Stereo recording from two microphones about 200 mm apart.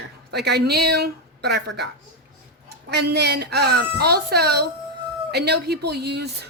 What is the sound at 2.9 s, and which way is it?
A woman's voice, 55° right (ahead or behind).